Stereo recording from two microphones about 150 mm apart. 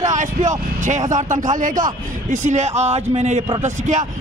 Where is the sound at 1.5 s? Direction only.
60° right (ahead or behind).